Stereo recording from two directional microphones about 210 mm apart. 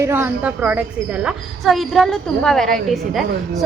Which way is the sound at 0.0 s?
10° right (ahead or behind).